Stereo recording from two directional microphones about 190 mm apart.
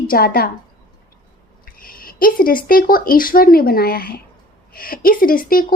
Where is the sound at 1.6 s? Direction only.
50° left (ahead or behind).